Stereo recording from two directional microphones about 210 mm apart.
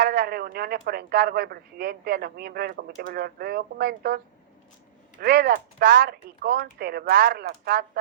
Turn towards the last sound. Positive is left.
turn(degrees=-50)  # may be behind; listen again after turning